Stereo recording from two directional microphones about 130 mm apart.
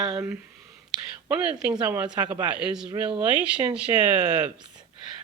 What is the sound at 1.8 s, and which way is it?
Speech, 10° right (ahead or behind).